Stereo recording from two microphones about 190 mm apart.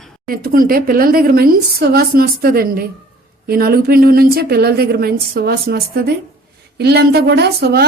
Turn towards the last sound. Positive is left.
turn(degrees=-60)  # may be behind; listen again after turning